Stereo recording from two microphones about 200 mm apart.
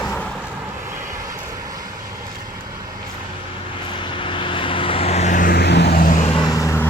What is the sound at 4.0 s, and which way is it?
Vehicle, 25° left (ahead or behind).